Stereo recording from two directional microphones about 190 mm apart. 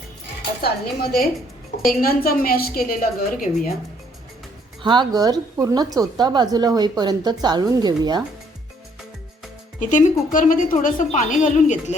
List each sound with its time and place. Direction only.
0.6 s a woman's voice: 55° left (ahead or behind)
4.8 s a woman's voice: 25° right (ahead or behind)
9.9 s a woman's voice: 45° left (ahead or behind)